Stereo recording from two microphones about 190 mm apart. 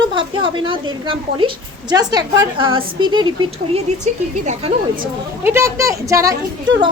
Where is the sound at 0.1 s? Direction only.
25° right (ahead or behind).